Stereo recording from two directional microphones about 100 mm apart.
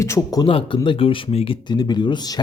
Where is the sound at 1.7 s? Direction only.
45° left (ahead or behind).